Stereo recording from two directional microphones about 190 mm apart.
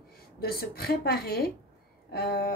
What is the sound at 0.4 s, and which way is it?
A woman's voice, 55° left (ahead or behind).